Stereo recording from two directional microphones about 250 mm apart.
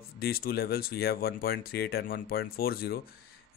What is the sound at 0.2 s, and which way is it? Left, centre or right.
Speech, left.